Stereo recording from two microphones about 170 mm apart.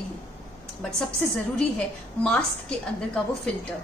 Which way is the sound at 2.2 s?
5° left (ahead or behind).